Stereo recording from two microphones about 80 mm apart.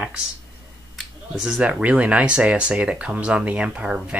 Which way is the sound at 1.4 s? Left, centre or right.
Centre.